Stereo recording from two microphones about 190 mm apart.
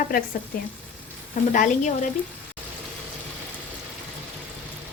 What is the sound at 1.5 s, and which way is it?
Speech, 40° left (ahead or behind).